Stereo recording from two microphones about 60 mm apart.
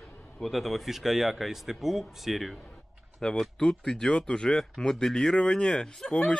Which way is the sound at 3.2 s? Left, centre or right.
Centre.